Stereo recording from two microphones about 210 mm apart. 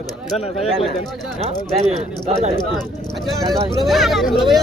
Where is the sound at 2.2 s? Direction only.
30° right (ahead or behind).